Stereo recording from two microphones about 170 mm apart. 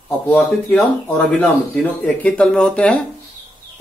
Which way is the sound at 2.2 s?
5° left (ahead or behind).